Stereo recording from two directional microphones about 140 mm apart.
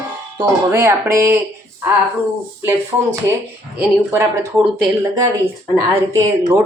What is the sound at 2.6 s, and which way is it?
A woman's voice, 15° right (ahead or behind).